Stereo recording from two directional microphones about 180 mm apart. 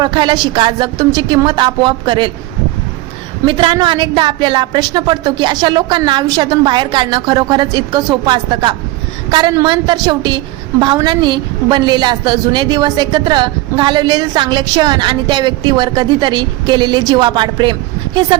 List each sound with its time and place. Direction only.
0.0 s a woman's voice: 25° right (ahead or behind)
3.4 s a woman's voice: 25° right (ahead or behind)